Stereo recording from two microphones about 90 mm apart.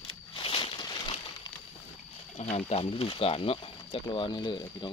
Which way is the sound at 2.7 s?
90° left.